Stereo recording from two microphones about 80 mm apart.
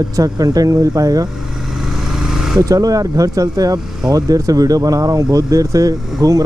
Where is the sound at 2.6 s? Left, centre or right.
Right.